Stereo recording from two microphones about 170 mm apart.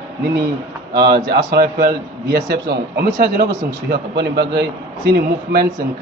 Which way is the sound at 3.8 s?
75° right (ahead or behind).